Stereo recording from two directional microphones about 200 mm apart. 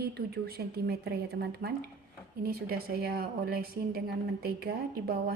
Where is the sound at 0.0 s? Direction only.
50° right (ahead or behind).